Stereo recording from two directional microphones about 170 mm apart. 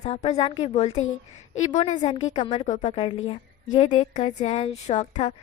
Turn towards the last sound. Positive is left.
turn(degrees=40)  # may be behind; listen again after turning